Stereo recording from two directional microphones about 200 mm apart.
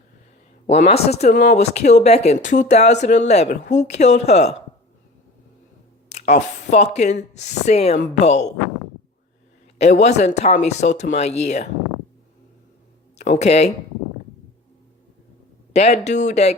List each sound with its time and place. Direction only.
0.7 s speech: 30° left (ahead or behind)
6.1 s speech: 35° left (ahead or behind)
9.7 s speech: 35° left (ahead or behind)
13.1 s speech: 35° left (ahead or behind)
15.7 s speech: 35° left (ahead or behind)